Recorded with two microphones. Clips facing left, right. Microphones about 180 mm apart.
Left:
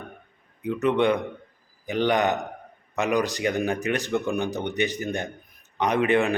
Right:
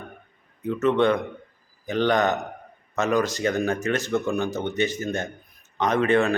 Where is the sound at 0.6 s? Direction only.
15° left (ahead or behind).